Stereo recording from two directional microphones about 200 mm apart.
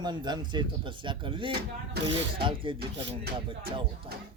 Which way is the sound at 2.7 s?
50° right (ahead or behind).